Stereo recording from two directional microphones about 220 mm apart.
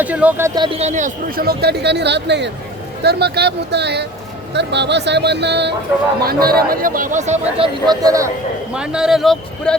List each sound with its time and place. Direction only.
0.0 s speech: 5° right (ahead or behind); by 7.7 s 30° right (ahead or behind)
7.9 s speech: 15° right (ahead or behind)
8.7 s speech: 5° right (ahead or behind)